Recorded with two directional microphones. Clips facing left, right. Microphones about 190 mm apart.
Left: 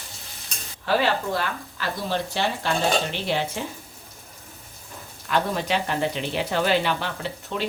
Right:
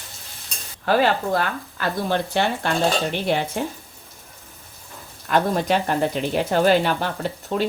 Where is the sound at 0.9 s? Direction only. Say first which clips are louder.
Right 4 dB; 50° right (ahead or behind).